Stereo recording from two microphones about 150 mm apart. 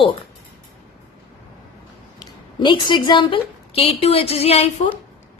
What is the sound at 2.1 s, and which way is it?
A woman's voice, 30° left (ahead or behind).